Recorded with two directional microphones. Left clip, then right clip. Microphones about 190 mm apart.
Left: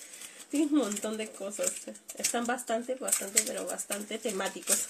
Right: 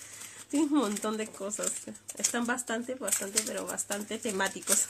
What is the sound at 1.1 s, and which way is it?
A woman's voice, 30° right (ahead or behind).